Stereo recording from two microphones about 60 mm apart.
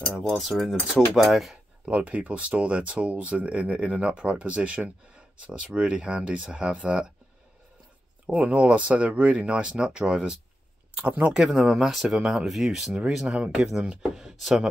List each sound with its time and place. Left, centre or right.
0.1 s speech: centre
1.9 s speech: right
8.3 s speech: right
11.3 s speech: centre